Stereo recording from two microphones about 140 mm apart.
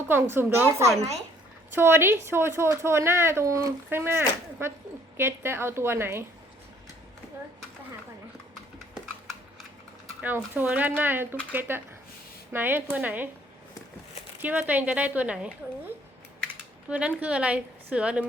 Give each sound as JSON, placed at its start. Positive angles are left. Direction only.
{"t": 0.1, "sound": "a woman's voice", "side_deg": -15}
{"t": 10.2, "sound": "a woman's voice", "side_deg": -15}
{"t": 14.3, "sound": "a woman's voice", "side_deg": -10}
{"t": 16.9, "sound": "a woman's voice", "side_deg": -10}